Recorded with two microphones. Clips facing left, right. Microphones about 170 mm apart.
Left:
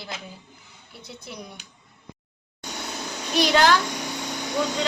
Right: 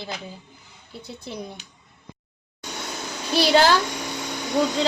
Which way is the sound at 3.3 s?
35° right (ahead or behind).